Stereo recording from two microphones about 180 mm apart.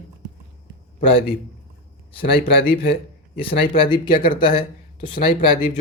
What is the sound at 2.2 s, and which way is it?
Speech, 30° left (ahead or behind).